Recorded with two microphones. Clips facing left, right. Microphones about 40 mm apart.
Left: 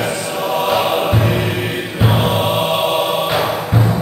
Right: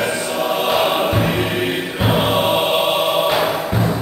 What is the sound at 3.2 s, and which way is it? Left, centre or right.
Music, centre.